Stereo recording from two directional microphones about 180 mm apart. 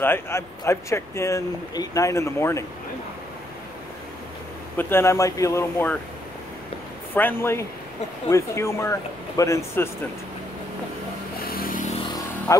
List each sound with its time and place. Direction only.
0.0 s speech: 15° left (ahead or behind)
4.7 s speech: 10° left (ahead or behind)
7.2 s speech: 10° left (ahead or behind)
11.4 s vehicle: 55° left (ahead or behind)
12.5 s speech: 15° left (ahead or behind)